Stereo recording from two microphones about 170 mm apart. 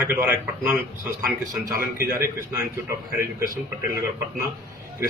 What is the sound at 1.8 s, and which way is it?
Speech, 15° right (ahead or behind).